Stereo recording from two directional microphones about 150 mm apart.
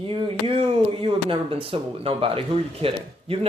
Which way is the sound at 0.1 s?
35° right (ahead or behind).